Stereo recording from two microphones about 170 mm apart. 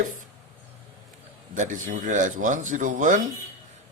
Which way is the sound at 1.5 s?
50° right (ahead or behind).